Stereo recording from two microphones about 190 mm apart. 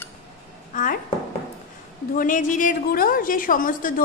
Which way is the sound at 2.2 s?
45° left (ahead or behind).